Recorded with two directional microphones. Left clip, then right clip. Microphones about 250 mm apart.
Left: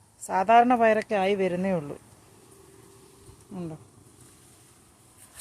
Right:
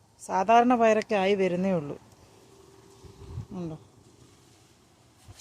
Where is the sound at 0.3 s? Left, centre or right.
Centre.